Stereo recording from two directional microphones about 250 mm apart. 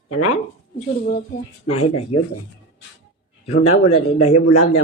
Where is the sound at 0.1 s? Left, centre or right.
Left.